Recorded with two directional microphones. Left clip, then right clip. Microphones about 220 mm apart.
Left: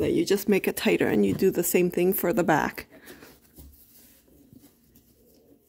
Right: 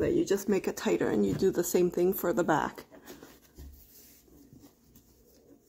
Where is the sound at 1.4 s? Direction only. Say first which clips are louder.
Left 4 dB; 35° left (ahead or behind).